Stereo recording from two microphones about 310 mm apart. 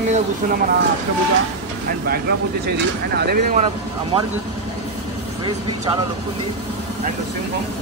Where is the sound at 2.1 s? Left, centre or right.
Right.